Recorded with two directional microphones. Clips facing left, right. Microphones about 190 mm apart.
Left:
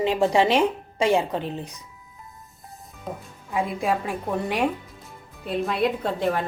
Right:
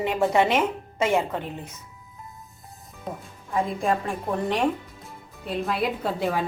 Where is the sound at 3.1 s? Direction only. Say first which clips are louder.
Even; centre (ahead or behind).